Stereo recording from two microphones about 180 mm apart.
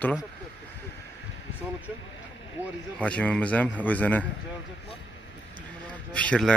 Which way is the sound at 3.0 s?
5° left (ahead or behind).